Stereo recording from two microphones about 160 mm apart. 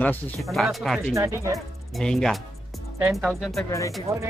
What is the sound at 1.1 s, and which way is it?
Speech, 20° right (ahead or behind).